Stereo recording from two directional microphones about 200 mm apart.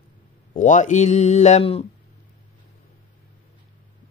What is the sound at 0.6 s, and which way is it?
Speech, 40° left (ahead or behind).